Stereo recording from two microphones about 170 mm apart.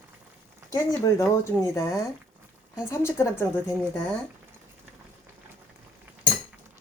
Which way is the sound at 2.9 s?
15° left (ahead or behind).